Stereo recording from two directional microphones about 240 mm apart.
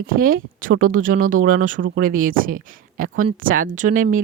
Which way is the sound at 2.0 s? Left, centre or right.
Right.